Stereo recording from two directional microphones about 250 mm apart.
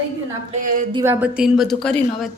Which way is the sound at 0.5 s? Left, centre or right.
Right.